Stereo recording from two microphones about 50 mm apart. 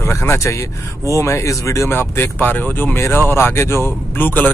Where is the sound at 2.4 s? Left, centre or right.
Left.